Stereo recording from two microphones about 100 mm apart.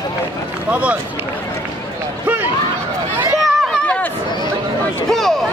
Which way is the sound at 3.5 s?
5° left (ahead or behind).